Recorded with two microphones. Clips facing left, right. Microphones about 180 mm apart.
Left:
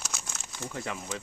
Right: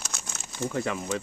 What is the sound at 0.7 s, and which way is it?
Speech, 70° right (ahead or behind).